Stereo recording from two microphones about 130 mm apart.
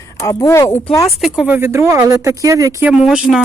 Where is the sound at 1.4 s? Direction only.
15° right (ahead or behind).